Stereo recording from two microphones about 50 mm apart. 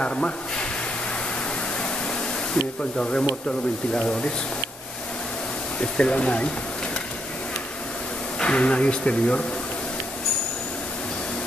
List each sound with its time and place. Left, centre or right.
0.0 s speech: centre
1.8 s pink noise: centre
3.9 s speech: centre
5.8 s speech: left
8.4 s speech: left